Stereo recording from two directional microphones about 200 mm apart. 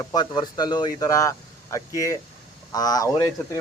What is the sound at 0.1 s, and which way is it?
A man's voice, 20° left (ahead or behind).